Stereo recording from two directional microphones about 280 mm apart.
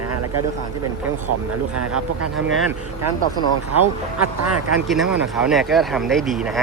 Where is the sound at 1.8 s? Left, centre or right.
Right.